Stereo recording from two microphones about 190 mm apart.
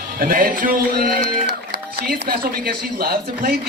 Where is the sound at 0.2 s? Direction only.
50° right (ahead or behind).